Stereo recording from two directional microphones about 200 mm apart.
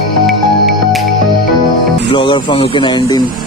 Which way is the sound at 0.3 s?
Centre (ahead or behind).